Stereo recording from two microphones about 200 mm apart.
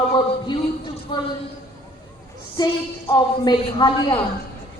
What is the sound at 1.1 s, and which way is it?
Speech, 25° left (ahead or behind).